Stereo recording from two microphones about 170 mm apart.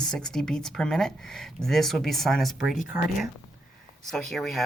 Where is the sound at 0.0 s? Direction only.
5° left (ahead or behind).